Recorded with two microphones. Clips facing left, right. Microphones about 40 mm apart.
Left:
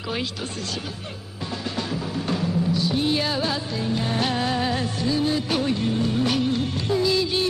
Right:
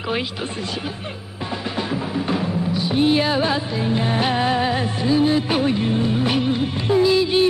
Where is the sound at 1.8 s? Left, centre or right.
Right.